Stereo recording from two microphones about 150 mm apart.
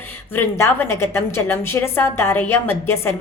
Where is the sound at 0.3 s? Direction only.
15° left (ahead or behind).